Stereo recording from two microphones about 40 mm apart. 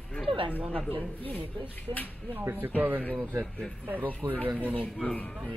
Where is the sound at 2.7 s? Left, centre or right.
Right.